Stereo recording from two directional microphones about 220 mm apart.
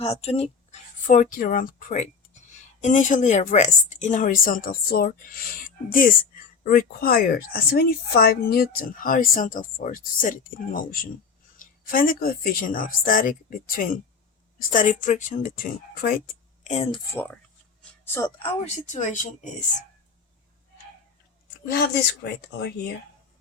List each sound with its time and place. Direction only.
0.0 s a woman's voice: 30° left (ahead or behind)
16.7 s speech: 25° left (ahead or behind)
17.2 s speech: 5° left (ahead or behind)
18.4 s a woman's voice: 30° left (ahead or behind)
21.7 s speech: 50° left (ahead or behind)